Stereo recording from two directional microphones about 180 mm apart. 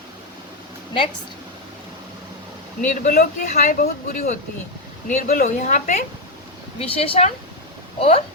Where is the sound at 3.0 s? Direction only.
50° left (ahead or behind).